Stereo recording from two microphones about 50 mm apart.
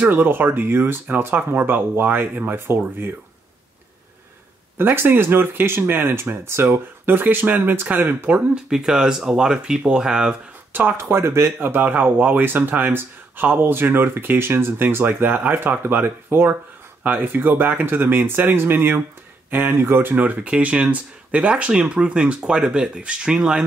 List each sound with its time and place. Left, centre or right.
0.0 s speech: right
4.9 s speech: right
8.6 s speech: centre
10.7 s speech: right
11.0 s speech: right
11.6 s speech: right
15.0 s speech: right
20.2 s speech: right
20.5 s speech: right